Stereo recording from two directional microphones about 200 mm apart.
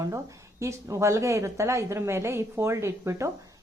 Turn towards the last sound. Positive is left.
turn(degrees=-15)  # may be behind; listen again after turning